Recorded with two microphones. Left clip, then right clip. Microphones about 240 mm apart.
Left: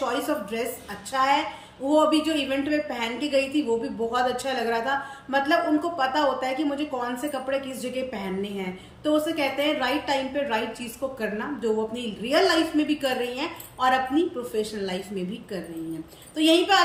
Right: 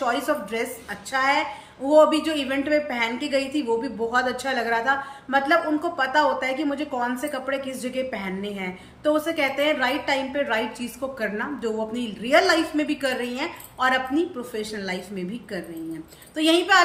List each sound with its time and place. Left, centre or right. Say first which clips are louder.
0.0 s a woman's voice: right 3 dB; centre